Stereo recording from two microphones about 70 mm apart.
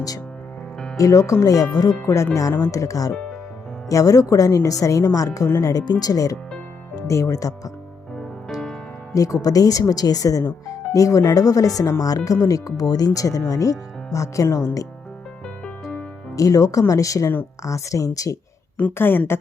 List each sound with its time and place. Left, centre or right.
0.9 s speech: left
2.0 s speech: left
5.8 s speech: left
8.4 s music: centre
9.1 s speech: left
11.3 s speech: left
16.3 s speech: left
18.8 s a woman's voice: left